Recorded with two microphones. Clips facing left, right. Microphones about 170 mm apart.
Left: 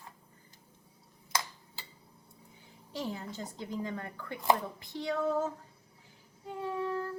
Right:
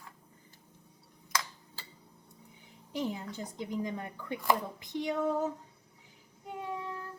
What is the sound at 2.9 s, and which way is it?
Speech, 15° right (ahead or behind).